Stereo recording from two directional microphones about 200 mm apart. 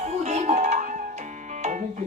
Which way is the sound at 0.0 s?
35° right (ahead or behind).